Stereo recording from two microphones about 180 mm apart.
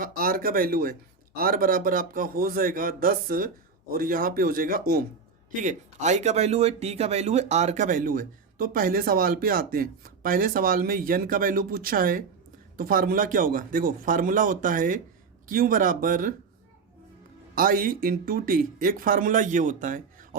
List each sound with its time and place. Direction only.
0.0 s speech: 55° right (ahead or behind)
5.6 s speech: 40° right (ahead or behind)
17.5 s speech: 50° right (ahead or behind)